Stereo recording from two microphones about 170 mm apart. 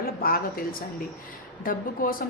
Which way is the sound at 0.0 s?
60° left (ahead or behind).